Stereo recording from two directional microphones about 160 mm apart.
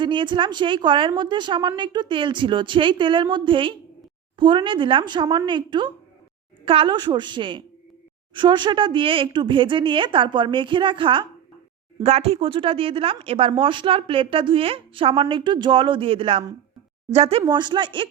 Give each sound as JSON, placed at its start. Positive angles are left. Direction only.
{"t": 0.0, "sound": "a woman's voice", "side_deg": -30}
{"t": 12.0, "sound": "speech", "side_deg": -40}
{"t": 17.4, "sound": "speech", "side_deg": -30}